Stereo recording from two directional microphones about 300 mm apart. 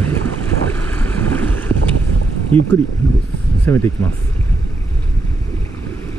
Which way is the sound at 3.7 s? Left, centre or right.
Centre.